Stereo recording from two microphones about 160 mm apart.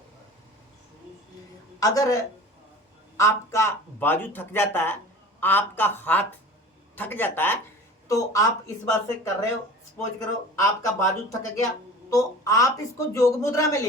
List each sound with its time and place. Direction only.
1.8 s speech: 20° left (ahead or behind)